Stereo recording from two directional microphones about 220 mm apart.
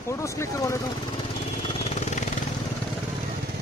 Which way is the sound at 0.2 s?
15° left (ahead or behind).